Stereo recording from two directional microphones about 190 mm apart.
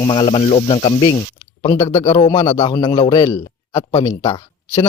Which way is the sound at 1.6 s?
15° left (ahead or behind).